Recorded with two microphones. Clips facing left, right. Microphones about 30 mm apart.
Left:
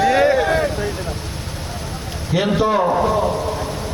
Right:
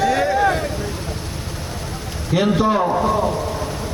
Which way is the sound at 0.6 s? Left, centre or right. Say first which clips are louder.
Left 5 dB; left.